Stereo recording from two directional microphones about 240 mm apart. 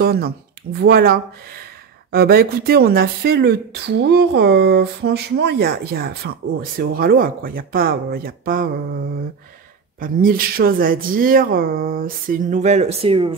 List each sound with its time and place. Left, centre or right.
0.0 s speech: right
9.9 s speech: right